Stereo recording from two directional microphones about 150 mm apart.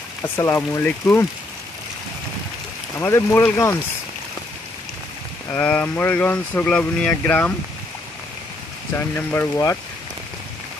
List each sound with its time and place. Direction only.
0.2 s speech: 15° left (ahead or behind)
3.0 s speech: 15° left (ahead or behind)
5.5 s speech: 10° left (ahead or behind)
9.1 s speech: 15° left (ahead or behind)